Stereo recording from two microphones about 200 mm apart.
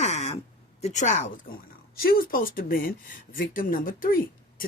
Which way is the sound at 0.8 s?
35° left (ahead or behind).